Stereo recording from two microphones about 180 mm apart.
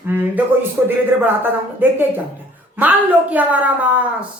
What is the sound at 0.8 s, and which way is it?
A woman's voice, 10° right (ahead or behind).